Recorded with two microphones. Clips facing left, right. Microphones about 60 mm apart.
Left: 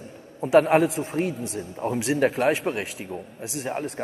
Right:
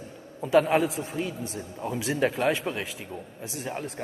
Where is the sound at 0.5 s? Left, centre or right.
Left.